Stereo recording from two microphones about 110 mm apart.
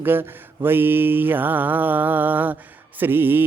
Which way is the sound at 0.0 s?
20° right (ahead or behind).